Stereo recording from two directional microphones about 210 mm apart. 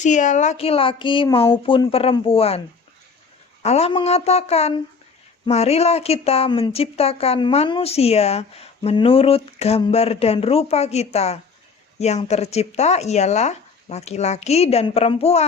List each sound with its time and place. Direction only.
0.0 s a woman's voice: 35° left (ahead or behind)
3.6 s a woman's voice: 30° left (ahead or behind)